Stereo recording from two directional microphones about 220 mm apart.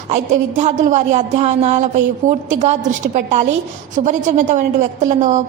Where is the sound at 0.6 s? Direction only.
35° right (ahead or behind).